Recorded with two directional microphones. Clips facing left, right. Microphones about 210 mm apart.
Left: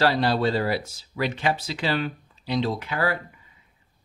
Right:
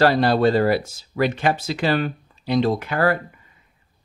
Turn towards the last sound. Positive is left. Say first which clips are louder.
# right 6 dB
turn(degrees=-50)  # may be behind; listen again after turning